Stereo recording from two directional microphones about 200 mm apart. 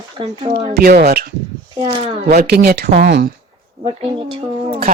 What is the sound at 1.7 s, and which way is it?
Speech, 25° right (ahead or behind).